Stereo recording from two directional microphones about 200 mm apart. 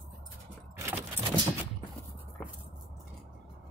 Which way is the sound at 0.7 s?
10° right (ahead or behind).